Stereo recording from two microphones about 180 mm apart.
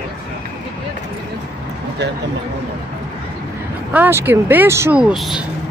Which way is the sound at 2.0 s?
70° right (ahead or behind).